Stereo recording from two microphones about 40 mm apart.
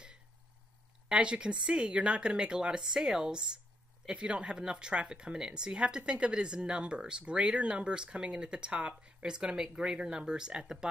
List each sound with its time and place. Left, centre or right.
1.0 s speech: right